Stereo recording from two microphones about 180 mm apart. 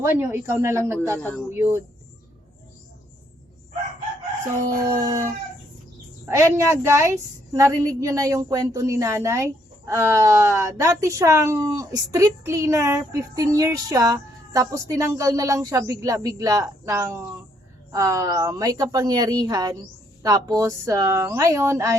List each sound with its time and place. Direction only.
0.0 s a woman's voice: 15° right (ahead or behind)
1.2 s speech: 10° left (ahead or behind)
1.5 s a woman's voice: 15° right (ahead or behind)
6.2 s a woman's voice: 15° right (ahead or behind)